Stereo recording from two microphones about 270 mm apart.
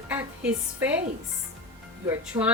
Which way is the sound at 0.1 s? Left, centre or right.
Centre.